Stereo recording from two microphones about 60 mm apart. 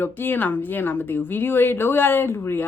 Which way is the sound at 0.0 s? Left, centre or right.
Left.